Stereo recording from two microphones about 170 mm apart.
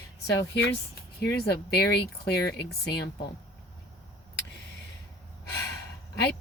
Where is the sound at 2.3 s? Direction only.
70° left (ahead or behind).